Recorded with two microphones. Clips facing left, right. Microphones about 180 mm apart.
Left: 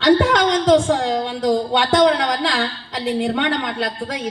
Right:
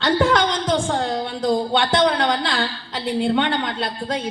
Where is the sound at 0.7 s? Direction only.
80° left.